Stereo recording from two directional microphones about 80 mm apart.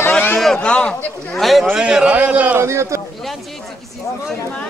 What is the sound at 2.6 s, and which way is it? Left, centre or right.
Speech, right.